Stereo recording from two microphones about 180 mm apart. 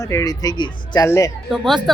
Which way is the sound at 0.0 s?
20° left (ahead or behind).